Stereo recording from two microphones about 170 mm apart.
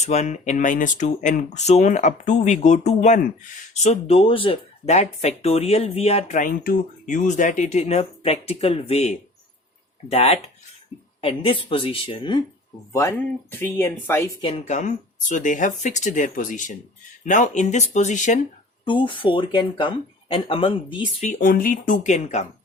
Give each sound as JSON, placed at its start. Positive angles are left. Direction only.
{"t": 0.0, "sound": "speech", "side_deg": 40}
{"t": 3.8, "sound": "speech", "side_deg": 35}
{"t": 13.5, "sound": "speech", "side_deg": 10}
{"t": 14.4, "sound": "speech", "side_deg": 40}
{"t": 18.9, "sound": "speech", "side_deg": 30}
{"t": 21.2, "sound": "speech", "side_deg": 45}